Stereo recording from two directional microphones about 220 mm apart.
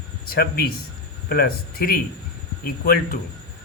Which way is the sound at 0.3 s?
45° left (ahead or behind).